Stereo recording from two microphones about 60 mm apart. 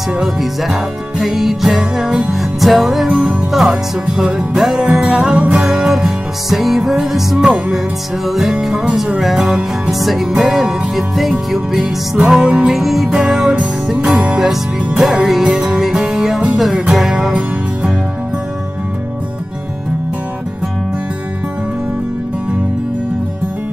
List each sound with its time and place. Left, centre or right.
0.2 s music: centre
3.1 s music: centre
14.0 s music: centre
14.4 s music: centre